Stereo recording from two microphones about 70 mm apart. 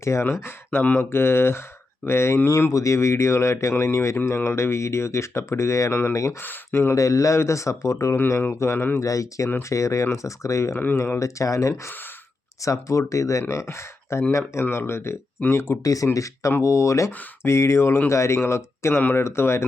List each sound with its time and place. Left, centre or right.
0.0 s speech: left
6.4 s speech: left
6.7 s speech: left
9.0 s speech: left
15.8 s speech: left